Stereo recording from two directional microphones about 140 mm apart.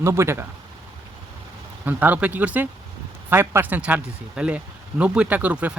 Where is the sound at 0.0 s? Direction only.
20° right (ahead or behind).